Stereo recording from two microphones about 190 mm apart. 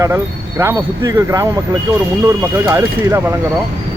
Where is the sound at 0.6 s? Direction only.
15° right (ahead or behind).